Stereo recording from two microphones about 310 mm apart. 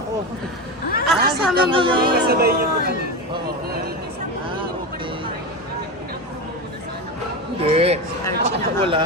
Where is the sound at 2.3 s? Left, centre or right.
Right.